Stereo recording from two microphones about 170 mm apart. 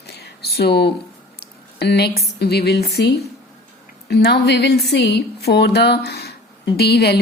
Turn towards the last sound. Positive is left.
turn(degrees=70)  # may be behind; listen again after turning